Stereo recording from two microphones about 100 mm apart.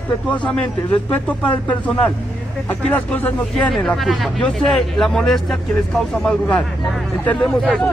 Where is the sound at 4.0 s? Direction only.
Centre (ahead or behind); by 7.5 s 15° left (ahead or behind).